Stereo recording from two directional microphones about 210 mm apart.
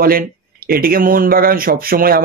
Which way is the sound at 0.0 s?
45° right (ahead or behind).